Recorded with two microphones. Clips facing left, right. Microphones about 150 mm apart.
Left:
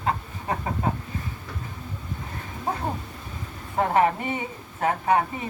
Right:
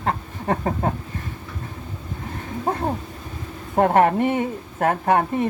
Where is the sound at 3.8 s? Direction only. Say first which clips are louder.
Right 5 dB; 55° right (ahead or behind).